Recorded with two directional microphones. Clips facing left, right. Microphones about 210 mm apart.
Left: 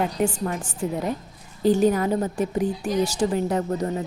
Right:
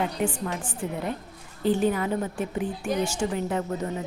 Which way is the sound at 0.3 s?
40° left (ahead or behind).